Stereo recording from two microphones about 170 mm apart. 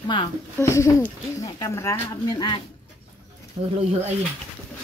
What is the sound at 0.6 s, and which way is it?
Speech, 15° left (ahead or behind).